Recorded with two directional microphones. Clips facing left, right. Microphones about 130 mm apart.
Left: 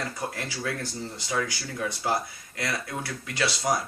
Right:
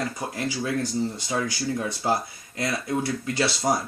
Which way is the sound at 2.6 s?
25° right (ahead or behind).